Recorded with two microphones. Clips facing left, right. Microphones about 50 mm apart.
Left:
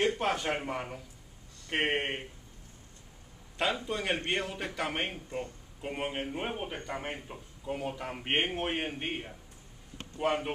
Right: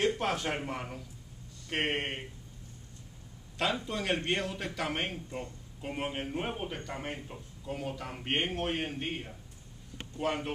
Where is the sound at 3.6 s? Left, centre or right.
Centre.